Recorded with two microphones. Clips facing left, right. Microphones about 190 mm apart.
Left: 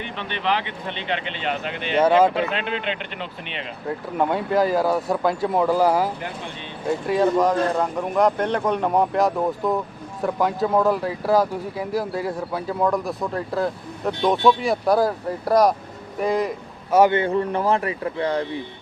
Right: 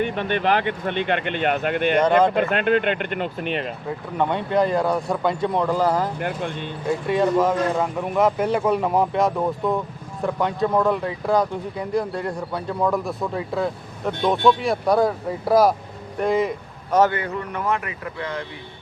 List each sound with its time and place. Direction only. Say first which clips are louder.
0.0 s speech: right 6 dB; 50° right (ahead or behind)
2.0 s speech: left 2 dB; 5° left (ahead or behind)
2.3 s speech: right 5 dB; 50° right (ahead or behind)
3.8 s speech: left 3 dB; 5° left (ahead or behind)
6.1 s speech: right 6 dB; 55° right (ahead or behind)
6.8 s a man's voice: left 1 dB; centre (ahead or behind)
17.1 s speech: left 7 dB; 25° left (ahead or behind)